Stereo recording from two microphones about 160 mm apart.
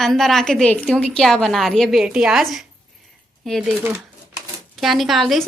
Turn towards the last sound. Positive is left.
turn(degrees=0)  # may be behind; listen again after turning